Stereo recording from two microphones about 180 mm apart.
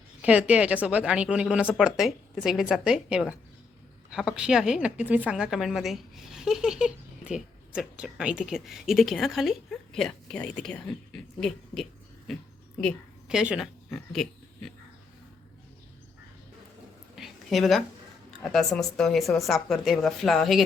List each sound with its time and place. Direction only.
0.2 s a woman's voice: 5° right (ahead or behind)
17.2 s a sound: centre (ahead or behind)
18.4 s speech: centre (ahead or behind)